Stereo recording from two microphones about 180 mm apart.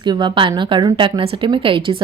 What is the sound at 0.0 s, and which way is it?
Speech, 25° right (ahead or behind).